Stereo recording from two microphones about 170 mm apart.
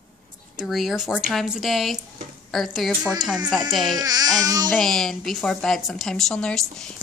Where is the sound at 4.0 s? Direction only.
25° right (ahead or behind).